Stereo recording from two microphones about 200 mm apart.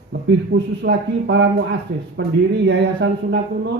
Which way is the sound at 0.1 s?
55° right (ahead or behind).